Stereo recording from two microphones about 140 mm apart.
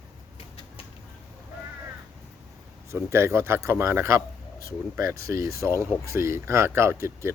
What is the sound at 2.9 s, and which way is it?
Speech, 15° right (ahead or behind).